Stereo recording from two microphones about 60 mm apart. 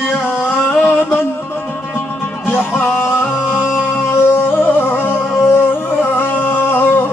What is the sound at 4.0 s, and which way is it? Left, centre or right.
Music, left.